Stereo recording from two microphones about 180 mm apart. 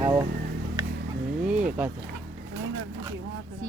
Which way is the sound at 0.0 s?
15° right (ahead or behind).